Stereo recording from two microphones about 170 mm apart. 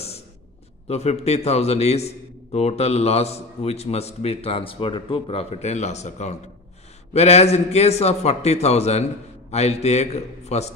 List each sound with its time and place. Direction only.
0.8 s a man's voice: 40° left (ahead or behind)